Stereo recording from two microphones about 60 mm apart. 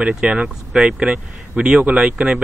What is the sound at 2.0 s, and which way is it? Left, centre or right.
Speech, centre.